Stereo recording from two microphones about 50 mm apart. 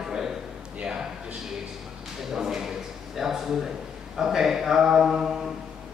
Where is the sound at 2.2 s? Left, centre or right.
Centre.